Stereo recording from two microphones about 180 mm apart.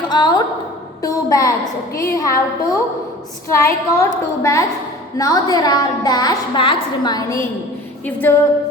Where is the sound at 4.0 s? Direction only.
15° left (ahead or behind).